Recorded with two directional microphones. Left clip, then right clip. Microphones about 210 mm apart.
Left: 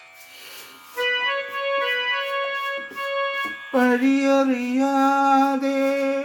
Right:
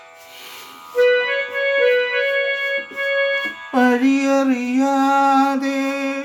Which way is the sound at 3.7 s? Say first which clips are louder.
Right 3 dB; 20° right (ahead or behind).